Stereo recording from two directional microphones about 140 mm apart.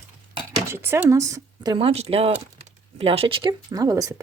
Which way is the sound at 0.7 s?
20° right (ahead or behind).